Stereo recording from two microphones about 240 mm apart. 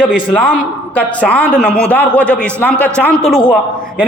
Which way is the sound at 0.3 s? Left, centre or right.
Centre.